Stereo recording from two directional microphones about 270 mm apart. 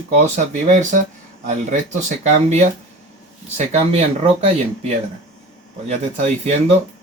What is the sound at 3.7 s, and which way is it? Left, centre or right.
Speech, right.